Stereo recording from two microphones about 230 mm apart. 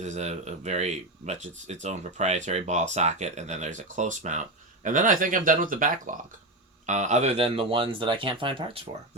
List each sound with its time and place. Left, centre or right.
0.0 s speech: right